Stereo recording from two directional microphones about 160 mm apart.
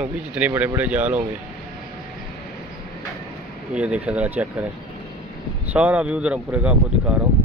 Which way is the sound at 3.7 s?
10° right (ahead or behind).